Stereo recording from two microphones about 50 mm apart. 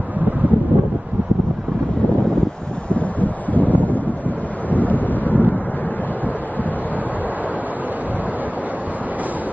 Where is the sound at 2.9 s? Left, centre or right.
Left.